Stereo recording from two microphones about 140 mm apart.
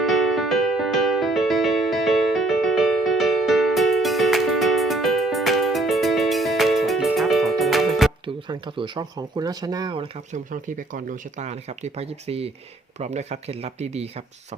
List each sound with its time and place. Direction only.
0.0 s music: centre (ahead or behind)
8.4 s speech: 35° right (ahead or behind)
10.3 s speech: 65° right (ahead or behind)